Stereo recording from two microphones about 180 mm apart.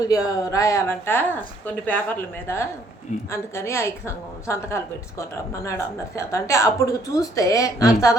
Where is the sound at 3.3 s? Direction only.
15° left (ahead or behind).